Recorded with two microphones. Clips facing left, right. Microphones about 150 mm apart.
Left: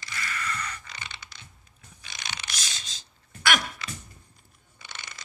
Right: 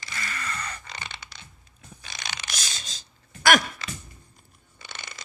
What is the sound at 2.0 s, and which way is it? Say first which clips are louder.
Gasp: right 1 dB; 40° right (ahead or behind).